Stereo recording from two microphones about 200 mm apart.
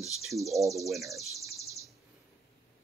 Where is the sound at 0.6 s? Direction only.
15° right (ahead or behind).